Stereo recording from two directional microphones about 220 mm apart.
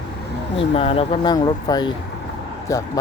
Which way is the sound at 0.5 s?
25° left (ahead or behind).